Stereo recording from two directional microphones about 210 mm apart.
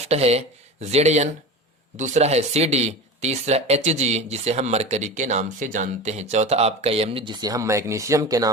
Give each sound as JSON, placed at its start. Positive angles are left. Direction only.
{"t": 0.1, "sound": "speech", "side_deg": -30}